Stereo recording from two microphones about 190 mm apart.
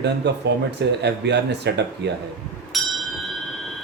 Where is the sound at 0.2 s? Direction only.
65° right (ahead or behind).